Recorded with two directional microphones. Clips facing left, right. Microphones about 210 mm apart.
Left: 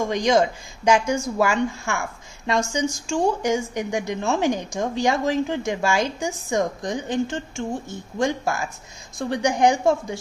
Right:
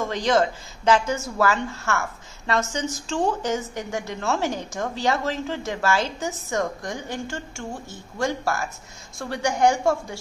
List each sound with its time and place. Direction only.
0.0 s speech: 15° left (ahead or behind)